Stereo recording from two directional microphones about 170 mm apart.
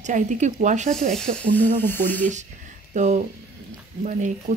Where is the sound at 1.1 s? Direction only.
5° left (ahead or behind).